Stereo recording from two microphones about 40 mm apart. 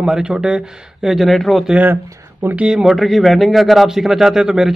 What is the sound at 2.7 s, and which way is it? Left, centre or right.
Speech, centre.